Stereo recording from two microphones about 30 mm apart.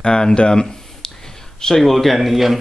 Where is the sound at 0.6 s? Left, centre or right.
Centre.